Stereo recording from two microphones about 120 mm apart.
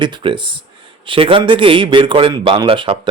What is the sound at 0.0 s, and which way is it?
Speech, 45° right (ahead or behind).